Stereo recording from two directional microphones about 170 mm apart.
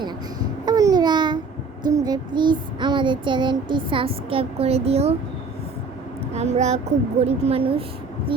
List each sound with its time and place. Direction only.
0.6 s babbling: 20° right (ahead or behind)
1.9 s child singing: 25° right (ahead or behind)
6.3 s a woman's voice: 40° right (ahead or behind)
8.3 s music: 30° right (ahead or behind)